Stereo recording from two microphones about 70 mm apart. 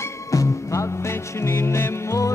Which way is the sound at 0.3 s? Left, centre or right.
Left.